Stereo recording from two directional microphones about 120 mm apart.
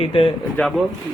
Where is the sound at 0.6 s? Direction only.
15° left (ahead or behind).